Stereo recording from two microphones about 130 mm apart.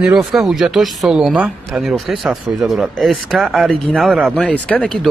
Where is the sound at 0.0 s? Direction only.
5° right (ahead or behind).